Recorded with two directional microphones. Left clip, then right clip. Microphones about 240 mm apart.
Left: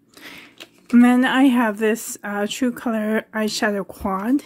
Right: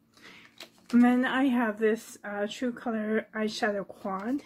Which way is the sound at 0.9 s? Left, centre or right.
Left.